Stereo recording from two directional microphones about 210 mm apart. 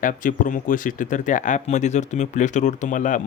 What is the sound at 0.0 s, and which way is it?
Speech, 40° left (ahead or behind).